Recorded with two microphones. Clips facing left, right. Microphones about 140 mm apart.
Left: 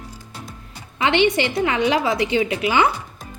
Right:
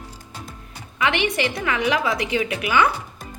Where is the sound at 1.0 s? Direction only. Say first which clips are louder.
Left 4 dB; 30° left (ahead or behind).